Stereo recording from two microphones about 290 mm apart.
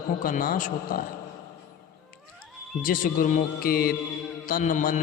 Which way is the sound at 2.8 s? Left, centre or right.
Left.